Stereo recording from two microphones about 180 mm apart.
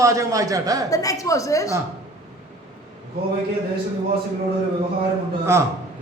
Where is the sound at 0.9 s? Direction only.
20° left (ahead or behind).